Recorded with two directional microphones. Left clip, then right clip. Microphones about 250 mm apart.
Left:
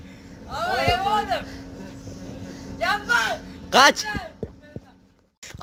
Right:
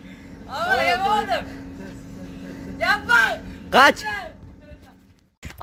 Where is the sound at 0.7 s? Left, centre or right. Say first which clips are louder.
Right 2 dB; centre.